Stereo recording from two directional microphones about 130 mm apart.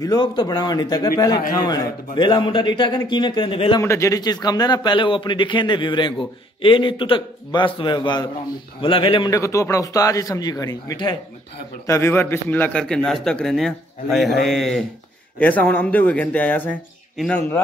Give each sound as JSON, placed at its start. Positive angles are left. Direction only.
{"t": 0.0, "sound": "a man's voice", "side_deg": 30}
{"t": 3.8, "sound": "a man's voice", "side_deg": 20}
{"t": 9.3, "sound": "a man's voice", "side_deg": 25}